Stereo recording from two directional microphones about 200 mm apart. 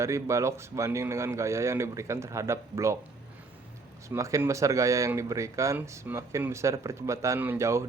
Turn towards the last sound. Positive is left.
turn(degrees=-15)  # may be behind; listen again after turning